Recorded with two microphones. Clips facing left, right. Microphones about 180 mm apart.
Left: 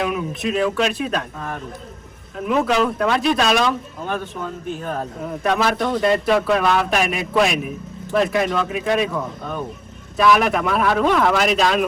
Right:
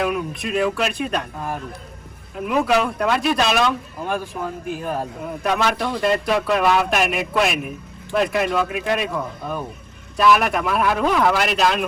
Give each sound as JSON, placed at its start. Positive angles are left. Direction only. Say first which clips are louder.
{"t": 0.0, "sound": "speech", "louder": "left 1 dB", "side_deg": 0}